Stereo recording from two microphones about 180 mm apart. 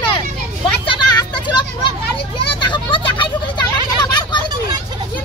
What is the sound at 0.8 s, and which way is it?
Vehicle, 25° left (ahead or behind).